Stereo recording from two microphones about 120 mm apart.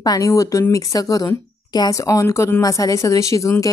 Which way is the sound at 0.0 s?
30° left (ahead or behind).